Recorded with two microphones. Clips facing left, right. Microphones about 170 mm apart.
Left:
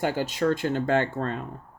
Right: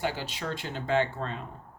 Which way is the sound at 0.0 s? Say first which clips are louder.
Left 8 dB; 50° left (ahead or behind).